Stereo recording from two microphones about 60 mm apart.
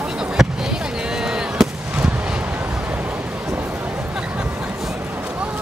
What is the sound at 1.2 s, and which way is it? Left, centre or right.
Fireworks, centre.